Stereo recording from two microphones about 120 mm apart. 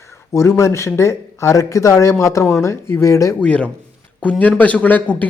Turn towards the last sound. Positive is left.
turn(degrees=10)  # may be behind; listen again after turning